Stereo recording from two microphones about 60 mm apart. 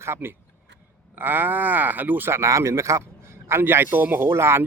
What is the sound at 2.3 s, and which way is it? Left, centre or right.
A man's voice, right.